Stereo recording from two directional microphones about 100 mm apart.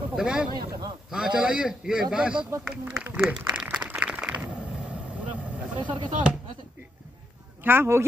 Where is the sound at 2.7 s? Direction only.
10° right (ahead or behind).